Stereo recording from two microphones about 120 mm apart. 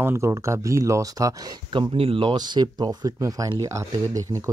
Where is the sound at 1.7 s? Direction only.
45° right (ahead or behind); by 4.5 s 25° right (ahead or behind).